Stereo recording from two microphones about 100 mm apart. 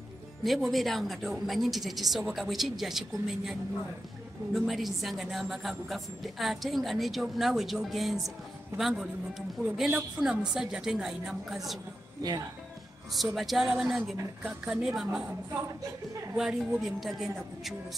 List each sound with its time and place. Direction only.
0.4 s a woman's voice: centre (ahead or behind)
4.6 s a woman's voice: centre (ahead or behind)
12.2 s speech: 40° right (ahead or behind)
13.1 s a woman's voice: centre (ahead or behind)
16.3 s a woman's voice: 5° right (ahead or behind)